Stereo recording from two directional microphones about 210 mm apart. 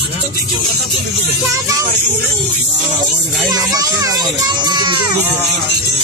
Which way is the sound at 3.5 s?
15° right (ahead or behind).